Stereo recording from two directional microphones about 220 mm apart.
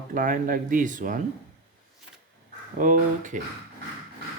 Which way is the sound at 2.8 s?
35° right (ahead or behind).